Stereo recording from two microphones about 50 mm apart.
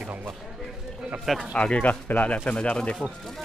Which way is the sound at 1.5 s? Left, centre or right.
Left.